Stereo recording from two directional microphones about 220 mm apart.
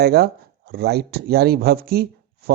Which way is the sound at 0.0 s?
45° right (ahead or behind).